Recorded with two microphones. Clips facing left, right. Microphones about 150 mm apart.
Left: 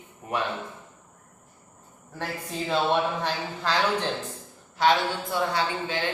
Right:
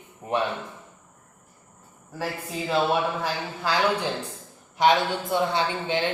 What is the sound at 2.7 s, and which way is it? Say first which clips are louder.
Speech: right 1 dB; 5° right (ahead or behind).